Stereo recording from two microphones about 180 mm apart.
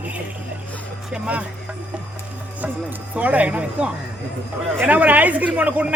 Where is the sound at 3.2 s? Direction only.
10° right (ahead or behind).